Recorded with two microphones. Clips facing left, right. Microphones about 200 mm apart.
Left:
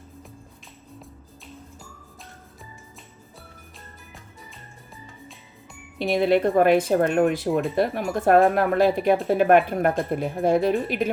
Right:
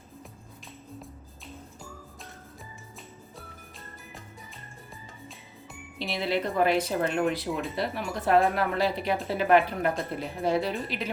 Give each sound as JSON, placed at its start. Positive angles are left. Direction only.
{"t": 6.0, "sound": "speech", "side_deg": 50}